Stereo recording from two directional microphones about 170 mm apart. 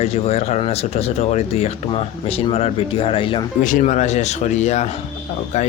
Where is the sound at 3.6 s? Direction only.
50° left (ahead or behind).